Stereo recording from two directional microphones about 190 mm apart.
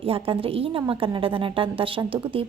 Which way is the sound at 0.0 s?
30° right (ahead or behind).